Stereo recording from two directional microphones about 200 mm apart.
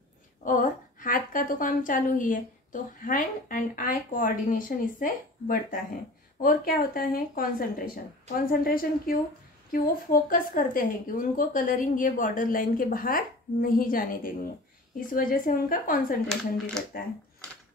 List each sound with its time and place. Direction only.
0.4 s a woman's voice: 40° left (ahead or behind)